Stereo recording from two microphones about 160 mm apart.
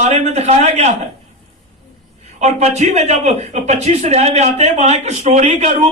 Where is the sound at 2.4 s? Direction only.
45° right (ahead or behind).